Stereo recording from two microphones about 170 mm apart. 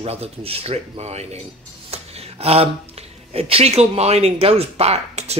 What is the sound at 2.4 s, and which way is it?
Speech, 35° right (ahead or behind).